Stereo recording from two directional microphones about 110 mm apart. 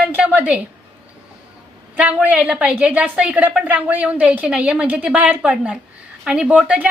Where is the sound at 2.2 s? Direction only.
15° right (ahead or behind).